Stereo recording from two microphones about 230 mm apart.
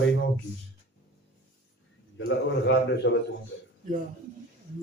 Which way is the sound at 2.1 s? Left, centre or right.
Left.